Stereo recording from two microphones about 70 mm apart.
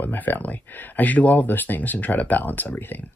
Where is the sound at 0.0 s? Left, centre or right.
Left.